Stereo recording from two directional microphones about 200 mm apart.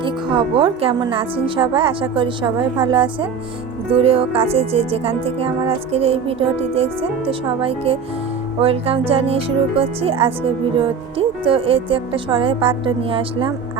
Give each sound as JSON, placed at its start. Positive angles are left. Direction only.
{"t": 0.0, "sound": "speech", "side_deg": -25}